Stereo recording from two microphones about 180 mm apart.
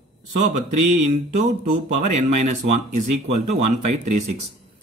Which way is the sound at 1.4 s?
40° right (ahead or behind).